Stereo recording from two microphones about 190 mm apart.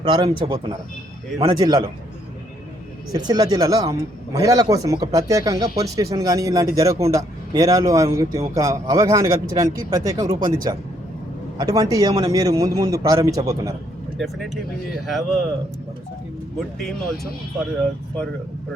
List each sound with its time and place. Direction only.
0.0 s speech: 25° right (ahead or behind)
3.1 s speech: 20° right (ahead or behind)
14.2 s speech: centre (ahead or behind)